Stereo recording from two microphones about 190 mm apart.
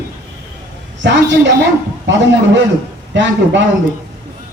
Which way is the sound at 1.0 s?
70° right (ahead or behind).